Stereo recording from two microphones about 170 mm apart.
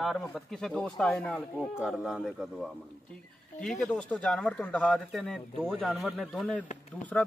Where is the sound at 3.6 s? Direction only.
5° left (ahead or behind).